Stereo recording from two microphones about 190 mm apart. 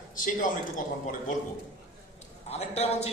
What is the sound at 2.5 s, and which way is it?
Speech, 35° left (ahead or behind).